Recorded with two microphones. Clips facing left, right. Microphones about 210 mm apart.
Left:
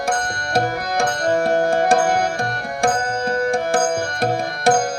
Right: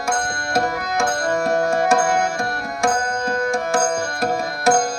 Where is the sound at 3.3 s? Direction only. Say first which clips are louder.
Left 2 dB; 35° left (ahead or behind).